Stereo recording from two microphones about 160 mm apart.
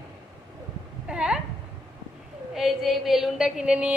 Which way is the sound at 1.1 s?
5° right (ahead or behind).